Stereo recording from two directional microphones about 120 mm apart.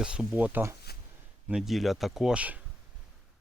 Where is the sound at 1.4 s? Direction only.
5° right (ahead or behind).